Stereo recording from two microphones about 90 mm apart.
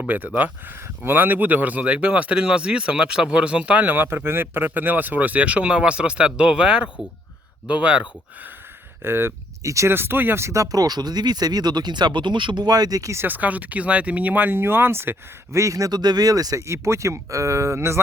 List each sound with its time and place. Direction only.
0.1 s speech: 20° right (ahead or behind)
9.0 s speech: 25° right (ahead or behind)
13.2 s speech: 20° right (ahead or behind)
15.5 s speech: 35° right (ahead or behind)